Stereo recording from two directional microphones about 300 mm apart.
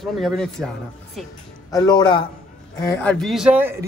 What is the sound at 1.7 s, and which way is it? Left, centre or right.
A man's voice, centre.